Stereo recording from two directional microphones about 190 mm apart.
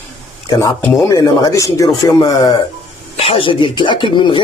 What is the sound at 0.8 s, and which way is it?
Speech, 15° left (ahead or behind).